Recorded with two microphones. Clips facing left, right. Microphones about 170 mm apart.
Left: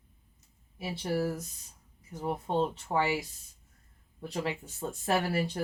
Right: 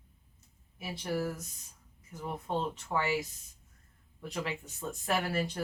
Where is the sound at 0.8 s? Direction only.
35° left (ahead or behind).